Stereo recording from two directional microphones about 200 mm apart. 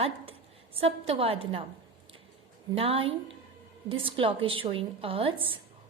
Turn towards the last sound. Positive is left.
turn(degrees=-30)  # may be behind; listen again after turning